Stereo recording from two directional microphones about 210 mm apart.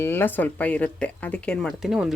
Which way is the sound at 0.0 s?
10° left (ahead or behind).